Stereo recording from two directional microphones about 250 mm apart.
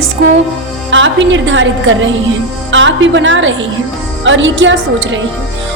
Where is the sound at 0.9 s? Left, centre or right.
Right.